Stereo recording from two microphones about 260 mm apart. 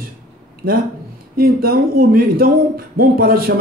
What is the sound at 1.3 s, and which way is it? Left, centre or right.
Speech, right.